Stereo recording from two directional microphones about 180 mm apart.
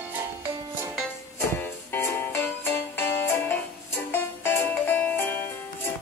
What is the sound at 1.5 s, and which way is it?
Music, 10° left (ahead or behind).